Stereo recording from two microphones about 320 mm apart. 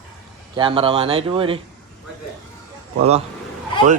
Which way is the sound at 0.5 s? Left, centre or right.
Centre.